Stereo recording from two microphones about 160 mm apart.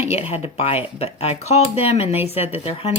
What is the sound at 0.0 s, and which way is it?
Speech, 40° left (ahead or behind).